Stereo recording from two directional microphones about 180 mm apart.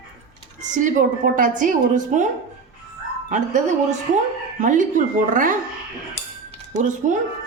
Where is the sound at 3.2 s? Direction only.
45° right (ahead or behind).